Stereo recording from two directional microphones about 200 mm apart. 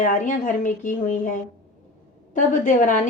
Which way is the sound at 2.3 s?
40° left (ahead or behind).